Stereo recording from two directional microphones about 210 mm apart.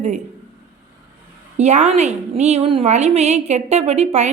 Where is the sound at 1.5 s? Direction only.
35° right (ahead or behind).